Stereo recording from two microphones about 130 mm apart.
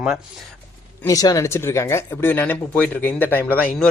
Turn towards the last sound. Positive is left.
turn(degrees=15)  # may be behind; listen again after turning